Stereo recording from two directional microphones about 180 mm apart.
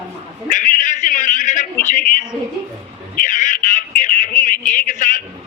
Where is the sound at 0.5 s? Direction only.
45° left (ahead or behind).